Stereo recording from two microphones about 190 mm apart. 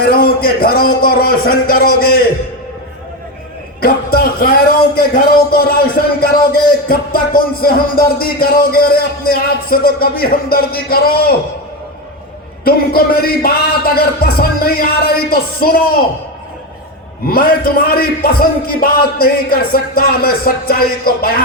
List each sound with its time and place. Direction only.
0.0 s a man's voice: 55° left (ahead or behind)
3.8 s speech: 55° left (ahead or behind)
12.6 s speech: 50° left (ahead or behind)
17.2 s speech: 50° left (ahead or behind)